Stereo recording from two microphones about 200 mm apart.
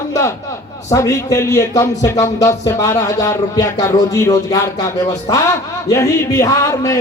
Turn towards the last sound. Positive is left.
turn(degrees=15)  # may be behind; listen again after turning